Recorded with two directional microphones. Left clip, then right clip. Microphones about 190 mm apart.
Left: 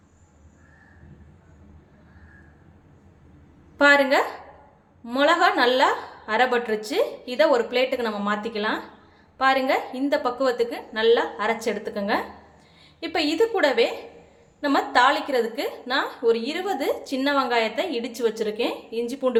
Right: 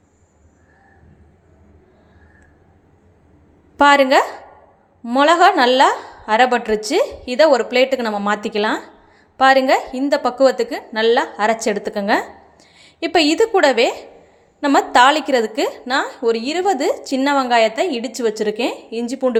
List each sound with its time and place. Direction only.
3.8 s a woman's voice: 35° right (ahead or behind)